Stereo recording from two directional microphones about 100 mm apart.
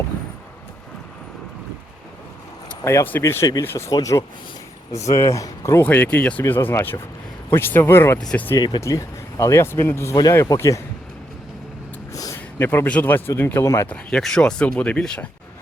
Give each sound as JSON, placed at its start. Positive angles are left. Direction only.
{"t": 2.8, "sound": "speech", "side_deg": 25}
{"t": 5.8, "sound": "speech", "side_deg": 15}
{"t": 8.8, "sound": "speech", "side_deg": 30}
{"t": 12.1, "sound": "a sound", "side_deg": 35}
{"t": 12.5, "sound": "speech", "side_deg": 20}
{"t": 13.9, "sound": "speech", "side_deg": 5}